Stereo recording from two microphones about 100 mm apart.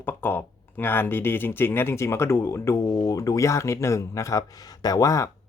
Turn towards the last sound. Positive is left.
turn(degrees=30)  # may be behind; listen again after turning